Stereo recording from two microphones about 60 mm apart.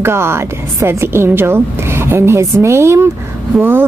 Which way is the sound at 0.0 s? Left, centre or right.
Right.